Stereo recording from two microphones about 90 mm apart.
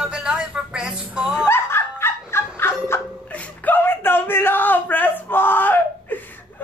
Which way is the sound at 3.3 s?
15° left (ahead or behind).